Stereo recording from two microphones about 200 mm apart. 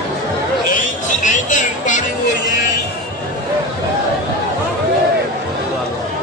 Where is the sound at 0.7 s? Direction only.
40° left (ahead or behind).